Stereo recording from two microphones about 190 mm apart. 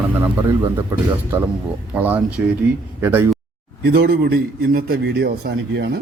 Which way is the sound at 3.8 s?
55° right (ahead or behind).